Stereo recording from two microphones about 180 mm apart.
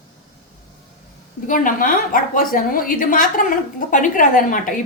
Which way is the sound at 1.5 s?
50° left (ahead or behind).